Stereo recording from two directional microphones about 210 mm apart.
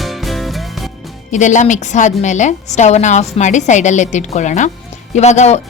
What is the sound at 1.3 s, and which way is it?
Speech, 35° left (ahead or behind).